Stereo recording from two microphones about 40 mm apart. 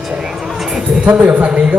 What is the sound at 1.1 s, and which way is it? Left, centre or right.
Speech, right.